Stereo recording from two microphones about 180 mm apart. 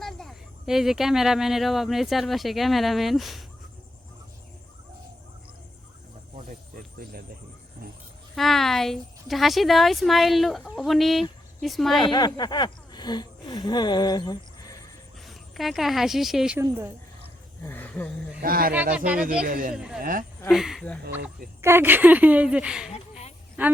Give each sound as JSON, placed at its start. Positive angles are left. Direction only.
{"t": 0.0, "sound": "speech", "side_deg": 0}
{"t": 6.3, "sound": "a sound", "side_deg": -45}
{"t": 8.4, "sound": "speech", "side_deg": 0}
{"t": 11.9, "sound": "speech", "side_deg": 25}
{"t": 15.2, "sound": "speech", "side_deg": 0}
{"t": 16.6, "sound": "speech", "side_deg": -15}
{"t": 17.7, "sound": "speech", "side_deg": 10}
{"t": 18.4, "sound": "speech", "side_deg": -55}
{"t": 18.9, "sound": "speech", "side_deg": -5}
{"t": 19.5, "sound": "speech", "side_deg": -50}
{"t": 19.7, "sound": "speech", "side_deg": -5}
{"t": 20.0, "sound": "speech", "side_deg": -50}
{"t": 20.5, "sound": "speech", "side_deg": 0}
{"t": 21.6, "sound": "speech", "side_deg": -15}